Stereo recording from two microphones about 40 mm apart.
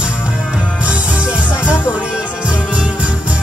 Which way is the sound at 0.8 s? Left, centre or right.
Right.